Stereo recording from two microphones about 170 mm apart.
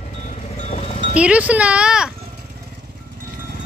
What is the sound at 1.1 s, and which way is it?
Speech, 5° right (ahead or behind).